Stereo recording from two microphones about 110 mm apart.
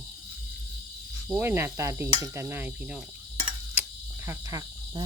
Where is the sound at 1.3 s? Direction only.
20° right (ahead or behind).